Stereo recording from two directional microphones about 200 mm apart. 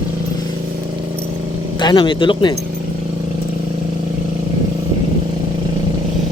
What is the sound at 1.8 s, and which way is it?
Speech, 25° left (ahead or behind).